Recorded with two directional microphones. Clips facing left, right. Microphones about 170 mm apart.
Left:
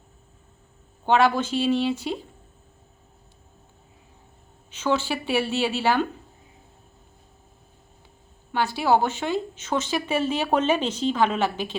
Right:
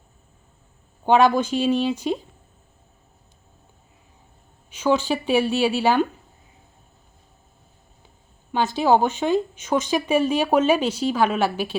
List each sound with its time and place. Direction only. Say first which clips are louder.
1.0 s speech: right 3 dB; 15° right (ahead or behind)
4.7 s speech: right 4 dB; 10° right (ahead or behind)
8.5 s speech: right 3 dB; 20° right (ahead or behind)